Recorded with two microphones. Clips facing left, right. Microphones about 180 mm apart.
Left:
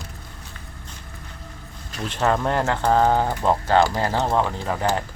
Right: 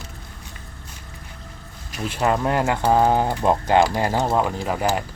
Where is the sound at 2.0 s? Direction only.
10° right (ahead or behind).